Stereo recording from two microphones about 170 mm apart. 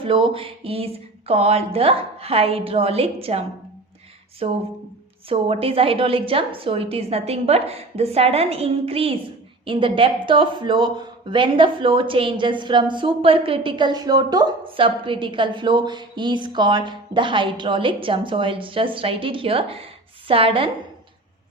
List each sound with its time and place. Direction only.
0.0 s a woman's voice: 30° right (ahead or behind)